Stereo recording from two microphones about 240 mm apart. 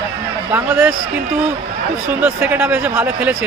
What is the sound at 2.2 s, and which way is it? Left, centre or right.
Speech, centre.